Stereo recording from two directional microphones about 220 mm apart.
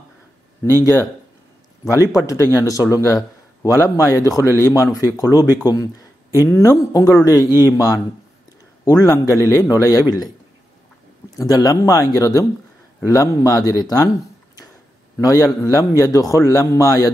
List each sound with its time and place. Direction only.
0.7 s a man's voice: 10° left (ahead or behind)
2.1 s a man's voice: 15° left (ahead or behind)
11.3 s a man's voice: 15° left (ahead or behind)
15.1 s a man's voice: 15° left (ahead or behind)